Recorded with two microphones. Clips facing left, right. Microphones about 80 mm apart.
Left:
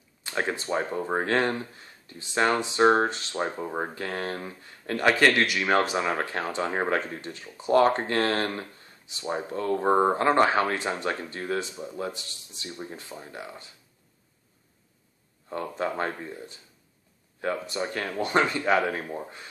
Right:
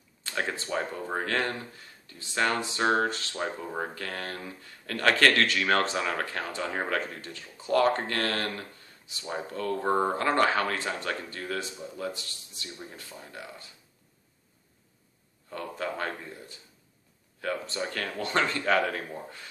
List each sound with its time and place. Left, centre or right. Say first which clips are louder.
0.2 s speech: left 3 dB; left
15.5 s speech: left 4 dB; left
17.6 s speech: left 3 dB; centre